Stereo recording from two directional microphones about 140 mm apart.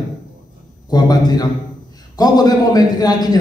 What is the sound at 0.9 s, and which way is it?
A man's voice, 30° left (ahead or behind).